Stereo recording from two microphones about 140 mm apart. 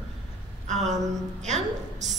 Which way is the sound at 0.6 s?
55° right (ahead or behind).